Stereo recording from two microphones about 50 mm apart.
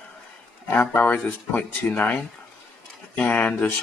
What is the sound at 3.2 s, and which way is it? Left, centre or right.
Speech, left.